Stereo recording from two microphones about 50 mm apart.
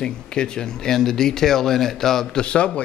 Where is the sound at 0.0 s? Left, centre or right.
Centre.